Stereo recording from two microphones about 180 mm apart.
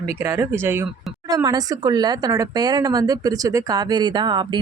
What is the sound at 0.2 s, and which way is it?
Speech, 15° right (ahead or behind).